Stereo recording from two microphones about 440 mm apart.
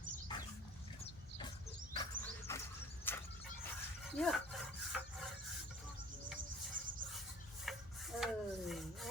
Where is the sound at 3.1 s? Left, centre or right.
Centre.